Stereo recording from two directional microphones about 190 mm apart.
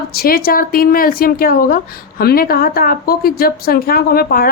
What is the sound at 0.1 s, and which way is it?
A woman's voice, 50° left (ahead or behind).